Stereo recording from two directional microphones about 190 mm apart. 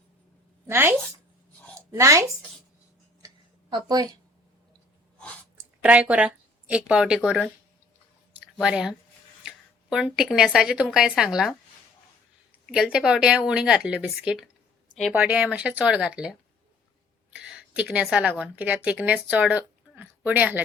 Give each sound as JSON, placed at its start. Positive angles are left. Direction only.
{"t": 0.7, "sound": "a woman's voice", "side_deg": -10}
{"t": 3.2, "sound": "a sound", "side_deg": -20}
{"t": 4.7, "sound": "sneeze", "side_deg": 5}
{"t": 5.8, "sound": "a woman's voice", "side_deg": -5}
{"t": 8.5, "sound": "a woman's voice", "side_deg": -5}